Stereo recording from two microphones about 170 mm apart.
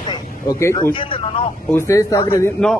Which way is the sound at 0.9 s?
30° left (ahead or behind).